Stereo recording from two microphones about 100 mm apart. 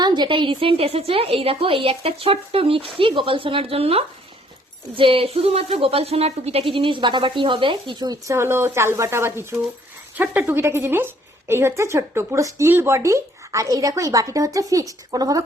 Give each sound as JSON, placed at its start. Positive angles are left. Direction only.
{"t": 0.0, "sound": "a woman's voice", "side_deg": -50}
{"t": 4.9, "sound": "a woman's voice", "side_deg": -65}
{"t": 8.0, "sound": "a woman's voice", "side_deg": -35}